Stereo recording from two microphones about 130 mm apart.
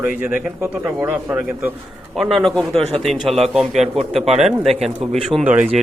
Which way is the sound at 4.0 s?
55° right (ahead or behind).